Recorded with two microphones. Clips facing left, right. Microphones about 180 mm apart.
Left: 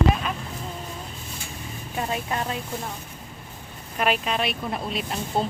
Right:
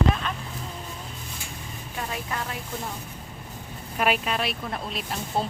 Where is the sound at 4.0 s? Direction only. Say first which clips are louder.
Left 1 dB; centre (ahead or behind).